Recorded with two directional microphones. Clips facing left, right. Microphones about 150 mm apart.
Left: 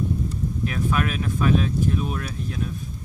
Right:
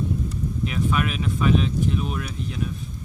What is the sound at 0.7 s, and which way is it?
Speech, 10° right (ahead or behind).